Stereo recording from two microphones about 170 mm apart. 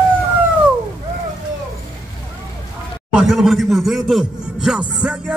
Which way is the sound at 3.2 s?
Centre (ahead or behind).